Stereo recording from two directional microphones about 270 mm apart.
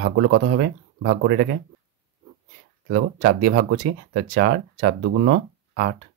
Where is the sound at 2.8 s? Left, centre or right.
Right.